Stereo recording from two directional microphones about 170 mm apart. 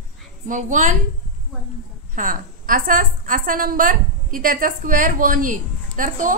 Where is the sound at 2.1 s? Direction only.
55° right (ahead or behind).